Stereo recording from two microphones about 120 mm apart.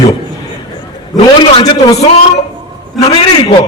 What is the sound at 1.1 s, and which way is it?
Speech, 40° left (ahead or behind).